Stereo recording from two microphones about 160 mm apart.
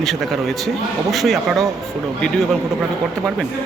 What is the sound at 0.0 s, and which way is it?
Speech, centre (ahead or behind).